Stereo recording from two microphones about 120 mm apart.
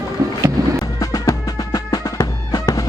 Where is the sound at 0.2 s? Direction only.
25° right (ahead or behind).